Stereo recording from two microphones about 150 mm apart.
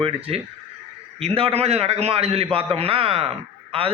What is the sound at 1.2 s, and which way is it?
A man's voice, 40° right (ahead or behind).